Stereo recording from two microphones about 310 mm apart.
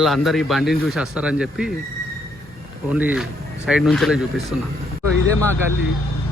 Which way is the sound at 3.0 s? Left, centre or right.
Centre.